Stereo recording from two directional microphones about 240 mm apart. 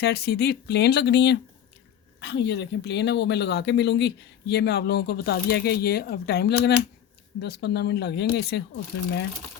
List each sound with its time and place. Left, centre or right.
0.0 s speech: left